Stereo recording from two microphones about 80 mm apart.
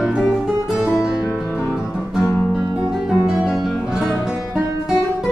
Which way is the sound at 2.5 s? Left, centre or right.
Centre.